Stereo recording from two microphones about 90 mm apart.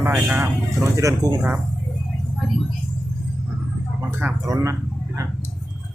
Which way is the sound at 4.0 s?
25° right (ahead or behind).